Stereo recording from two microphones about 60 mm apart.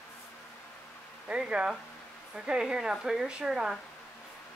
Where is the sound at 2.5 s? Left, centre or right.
Centre.